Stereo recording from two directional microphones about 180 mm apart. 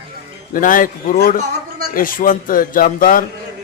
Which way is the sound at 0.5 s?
50° left (ahead or behind).